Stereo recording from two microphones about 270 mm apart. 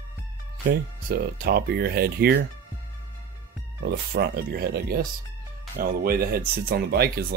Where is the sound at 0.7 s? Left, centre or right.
Right.